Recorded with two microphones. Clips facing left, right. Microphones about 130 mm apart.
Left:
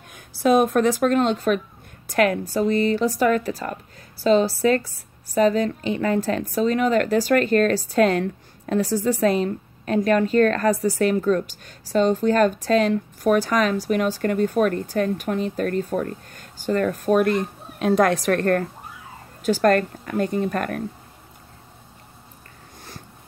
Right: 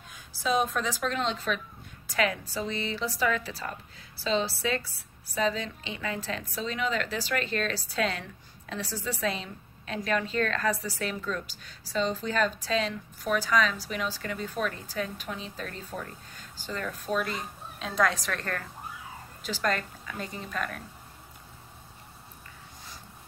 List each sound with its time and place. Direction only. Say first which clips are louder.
0.1 s a woman's voice: left 10 dB; 55° left (ahead or behind)